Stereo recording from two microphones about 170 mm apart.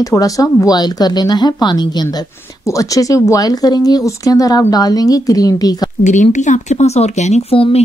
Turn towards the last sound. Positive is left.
turn(degrees=35)  # may be behind; listen again after turning